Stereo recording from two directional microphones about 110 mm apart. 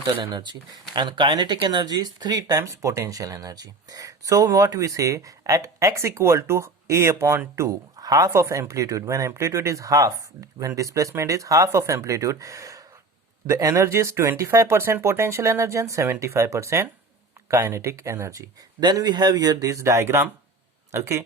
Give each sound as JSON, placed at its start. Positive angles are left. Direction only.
{"t": 0.2, "sound": "speech", "side_deg": -45}
{"t": 18.8, "sound": "speech", "side_deg": -40}